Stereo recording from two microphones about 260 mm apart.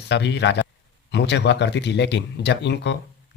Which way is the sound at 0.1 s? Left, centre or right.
Left.